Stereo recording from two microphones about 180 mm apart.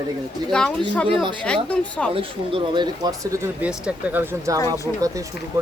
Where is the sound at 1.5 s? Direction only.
5° left (ahead or behind).